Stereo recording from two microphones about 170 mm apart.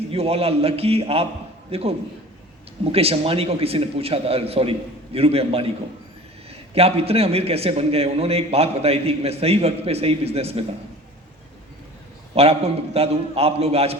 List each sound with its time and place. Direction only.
0.1 s a man's voice: 35° right (ahead or behind)
12.3 s a man's voice: 35° right (ahead or behind)